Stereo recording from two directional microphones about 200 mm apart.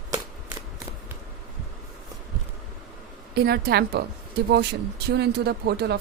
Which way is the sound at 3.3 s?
50° right (ahead or behind).